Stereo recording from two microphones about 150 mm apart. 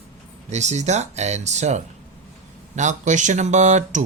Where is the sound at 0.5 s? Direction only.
50° right (ahead or behind).